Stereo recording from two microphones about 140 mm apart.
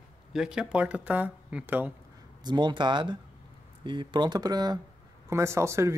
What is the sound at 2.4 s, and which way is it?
Speech, 30° right (ahead or behind).